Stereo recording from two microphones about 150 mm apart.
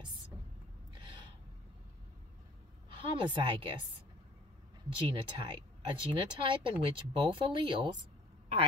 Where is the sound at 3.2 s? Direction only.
35° right (ahead or behind).